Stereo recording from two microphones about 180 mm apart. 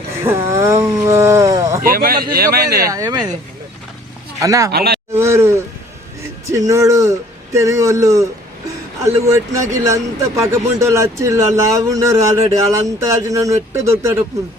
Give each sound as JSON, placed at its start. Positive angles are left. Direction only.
{"t": 0.5, "sound": "speech", "side_deg": -15}
{"t": 1.8, "sound": "speech", "side_deg": -55}
{"t": 2.9, "sound": "speech", "side_deg": -20}
{"t": 4.4, "sound": "speech", "side_deg": -15}
{"t": 4.7, "sound": "speech", "side_deg": -60}
{"t": 5.1, "sound": "speech", "side_deg": -15}
{"t": 6.6, "sound": "a man's voice", "side_deg": -20}